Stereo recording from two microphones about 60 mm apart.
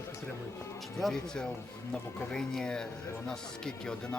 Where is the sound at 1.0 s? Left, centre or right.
Centre.